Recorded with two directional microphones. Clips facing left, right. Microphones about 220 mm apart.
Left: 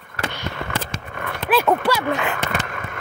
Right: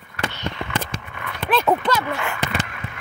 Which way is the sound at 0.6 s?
50° left (ahead or behind).